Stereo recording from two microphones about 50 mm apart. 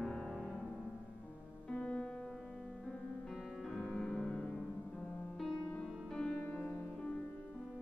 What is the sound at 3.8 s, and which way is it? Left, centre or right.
Music, left.